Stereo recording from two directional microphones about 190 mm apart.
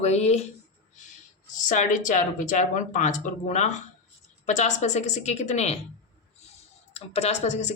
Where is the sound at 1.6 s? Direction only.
40° left (ahead or behind).